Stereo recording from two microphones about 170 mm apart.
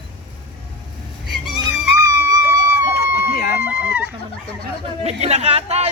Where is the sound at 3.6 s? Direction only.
10° right (ahead or behind).